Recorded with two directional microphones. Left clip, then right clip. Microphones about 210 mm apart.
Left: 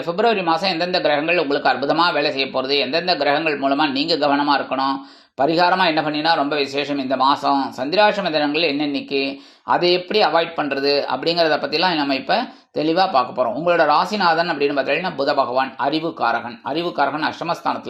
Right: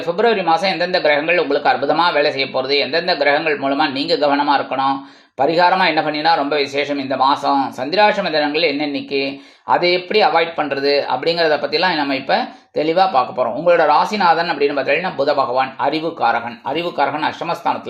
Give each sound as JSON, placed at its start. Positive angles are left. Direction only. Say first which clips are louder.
{"t": 0.2, "sound": "speech", "louder": "right 3 dB", "side_deg": 25}